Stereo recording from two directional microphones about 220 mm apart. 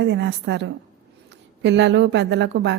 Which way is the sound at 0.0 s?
50° right (ahead or behind).